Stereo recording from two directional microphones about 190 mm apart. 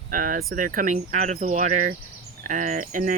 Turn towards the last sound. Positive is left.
turn(degrees=-45)  # may be behind; listen again after turning